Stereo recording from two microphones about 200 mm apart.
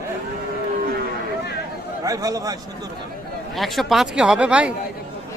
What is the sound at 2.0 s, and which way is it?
Speech, 15° right (ahead or behind).